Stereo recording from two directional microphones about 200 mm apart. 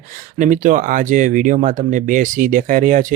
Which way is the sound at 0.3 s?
40° right (ahead or behind).